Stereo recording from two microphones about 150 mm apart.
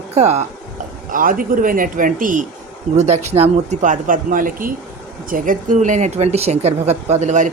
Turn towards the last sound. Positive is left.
turn(degrees=-55)  # may be behind; listen again after turning